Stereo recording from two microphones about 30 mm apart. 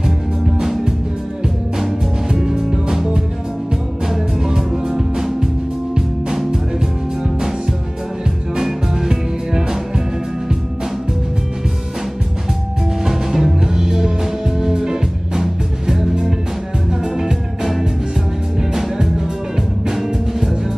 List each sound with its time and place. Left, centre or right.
2.2 s music: right
4.1 s music: centre
8.6 s music: centre
13.0 s music: centre
18.6 s music: centre